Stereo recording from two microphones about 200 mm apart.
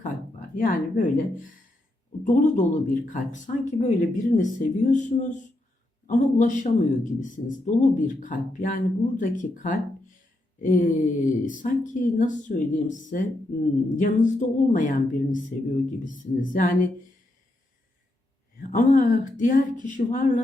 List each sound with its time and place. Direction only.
0.0 s a sound: 40° left (ahead or behind)
2.2 s speech: 40° left (ahead or behind)
18.7 s speech: 40° left (ahead or behind)